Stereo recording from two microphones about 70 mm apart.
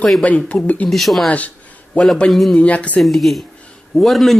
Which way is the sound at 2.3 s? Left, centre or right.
Centre.